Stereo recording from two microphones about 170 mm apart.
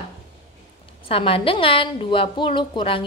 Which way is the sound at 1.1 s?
35° left (ahead or behind).